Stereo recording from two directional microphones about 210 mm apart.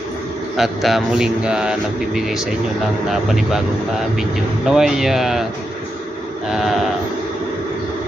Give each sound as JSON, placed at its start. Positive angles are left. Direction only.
{"t": 0.5, "sound": "speech", "side_deg": 0}
{"t": 6.5, "sound": "speech", "side_deg": 0}